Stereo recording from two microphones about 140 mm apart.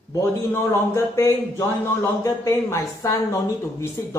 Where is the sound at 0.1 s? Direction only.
20° left (ahead or behind).